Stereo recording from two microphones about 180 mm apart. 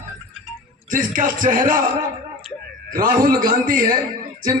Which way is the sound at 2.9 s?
50° right (ahead or behind).